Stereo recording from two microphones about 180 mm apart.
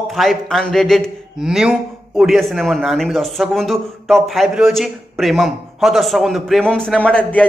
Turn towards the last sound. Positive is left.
turn(degrees=5)  # may be behind; listen again after turning